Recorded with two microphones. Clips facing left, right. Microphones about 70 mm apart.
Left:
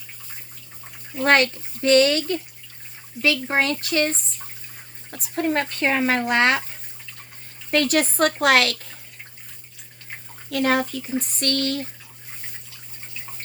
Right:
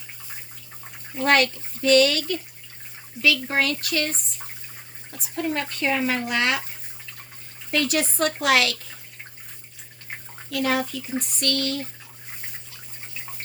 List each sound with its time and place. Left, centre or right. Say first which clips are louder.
1.2 s speech: left 2 dB; left
5.1 s speech: left 4 dB; left
7.7 s speech: left 4 dB; left
10.5 s speech: left 3 dB; left